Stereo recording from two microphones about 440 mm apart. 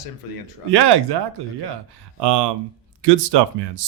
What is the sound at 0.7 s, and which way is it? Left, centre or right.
Speech, right.